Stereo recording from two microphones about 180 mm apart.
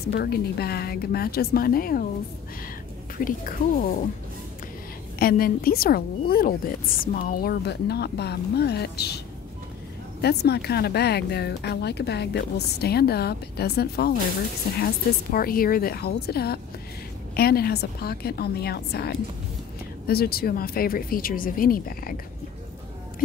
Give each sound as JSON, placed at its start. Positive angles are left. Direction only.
{"t": 0.0, "sound": "a woman's voice", "side_deg": 65}
{"t": 3.3, "sound": "speech", "side_deg": 50}
{"t": 5.2, "sound": "a woman's voice", "side_deg": 55}
{"t": 10.2, "sound": "a woman's voice", "side_deg": 65}
{"t": 15.3, "sound": "a woman's voice", "side_deg": 55}